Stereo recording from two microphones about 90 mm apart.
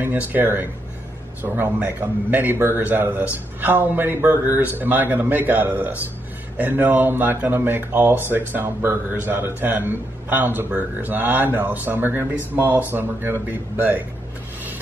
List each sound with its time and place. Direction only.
0.0 s a man's voice: 20° right (ahead or behind)